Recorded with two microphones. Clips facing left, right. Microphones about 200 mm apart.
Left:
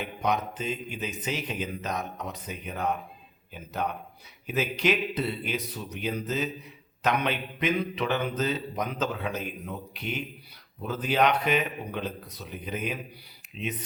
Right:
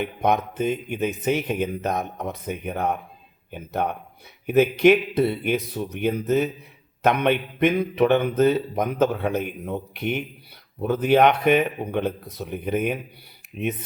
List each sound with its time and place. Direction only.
0.0 s speech: 55° right (ahead or behind)